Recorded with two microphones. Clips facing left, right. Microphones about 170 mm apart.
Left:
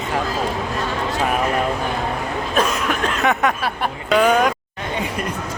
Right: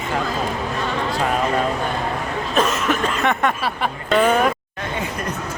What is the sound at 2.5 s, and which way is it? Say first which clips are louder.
Speech: right 1 dB; centre (ahead or behind).